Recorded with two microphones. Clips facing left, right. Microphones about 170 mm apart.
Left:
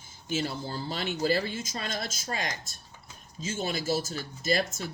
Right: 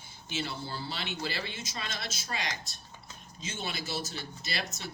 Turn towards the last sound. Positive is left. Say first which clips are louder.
# left 10 dB
turn(degrees=45)  # may be behind; listen again after turning